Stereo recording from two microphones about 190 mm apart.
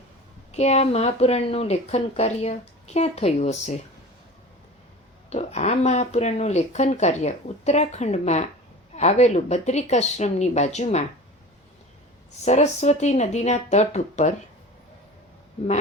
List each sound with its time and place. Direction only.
0.5 s speech: 35° left (ahead or behind)
5.3 s speech: 35° left (ahead or behind)
12.5 s speech: 35° left (ahead or behind)